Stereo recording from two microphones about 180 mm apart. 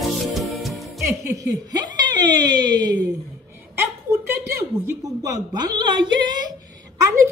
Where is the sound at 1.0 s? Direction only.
20° right (ahead or behind).